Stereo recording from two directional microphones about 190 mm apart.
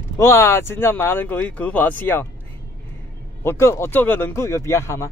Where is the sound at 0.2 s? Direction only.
15° left (ahead or behind).